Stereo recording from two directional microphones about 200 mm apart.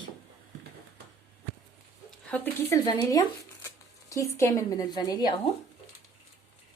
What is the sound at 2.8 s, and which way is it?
A woman's voice, 20° left (ahead or behind).